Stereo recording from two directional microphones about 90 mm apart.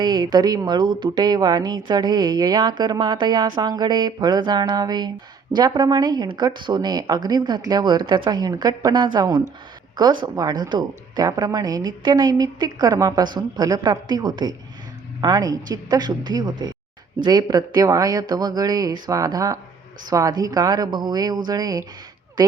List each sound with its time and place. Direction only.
0.0 s a woman's voice: 50° right (ahead or behind)